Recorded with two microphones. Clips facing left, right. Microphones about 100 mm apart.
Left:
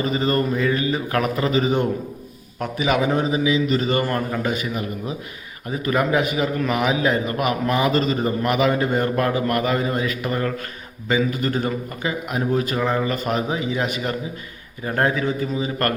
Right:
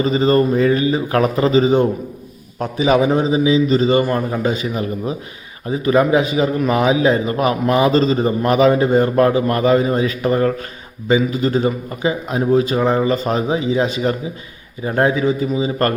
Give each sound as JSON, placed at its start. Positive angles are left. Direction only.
{"t": 0.1, "sound": "a man's voice", "side_deg": -25}